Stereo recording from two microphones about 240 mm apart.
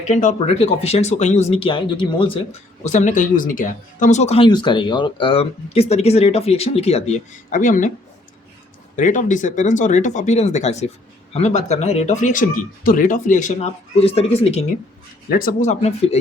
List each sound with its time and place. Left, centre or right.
0.1 s speech: left
9.0 s speech: left
15.3 s speech: left